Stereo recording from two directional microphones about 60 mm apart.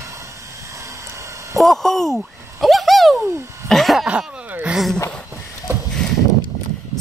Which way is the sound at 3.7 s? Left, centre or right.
Centre.